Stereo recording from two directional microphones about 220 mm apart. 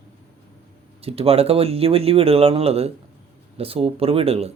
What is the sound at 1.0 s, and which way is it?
Speech, 25° right (ahead or behind).